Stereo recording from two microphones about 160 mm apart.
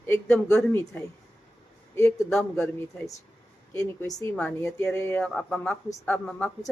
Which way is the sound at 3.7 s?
20° left (ahead or behind).